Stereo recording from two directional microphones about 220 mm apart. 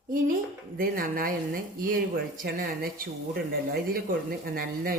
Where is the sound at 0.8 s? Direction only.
40° right (ahead or behind).